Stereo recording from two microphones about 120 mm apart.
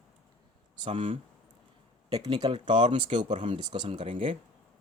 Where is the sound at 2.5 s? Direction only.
45° right (ahead or behind).